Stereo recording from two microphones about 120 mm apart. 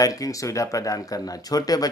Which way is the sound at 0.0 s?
30° left (ahead or behind).